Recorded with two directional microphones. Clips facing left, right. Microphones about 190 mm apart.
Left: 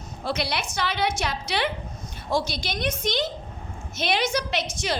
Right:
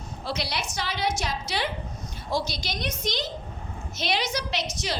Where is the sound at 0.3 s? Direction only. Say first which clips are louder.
Left 4 dB; 55° left (ahead or behind).